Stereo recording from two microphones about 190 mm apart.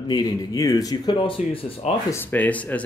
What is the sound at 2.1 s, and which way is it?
Speech, 10° left (ahead or behind).